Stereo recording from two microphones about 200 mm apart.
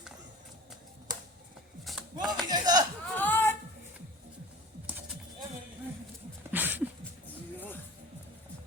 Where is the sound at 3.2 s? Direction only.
10° left (ahead or behind).